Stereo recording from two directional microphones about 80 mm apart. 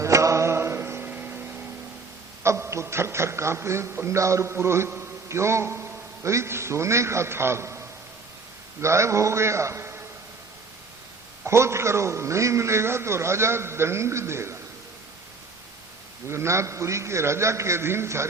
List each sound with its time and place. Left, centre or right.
0.0 s music: right
2.4 s a man's voice: right
11.4 s a man's voice: right
16.3 s a man's voice: right